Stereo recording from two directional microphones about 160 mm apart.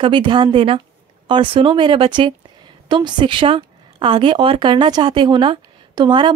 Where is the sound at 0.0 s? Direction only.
30° right (ahead or behind).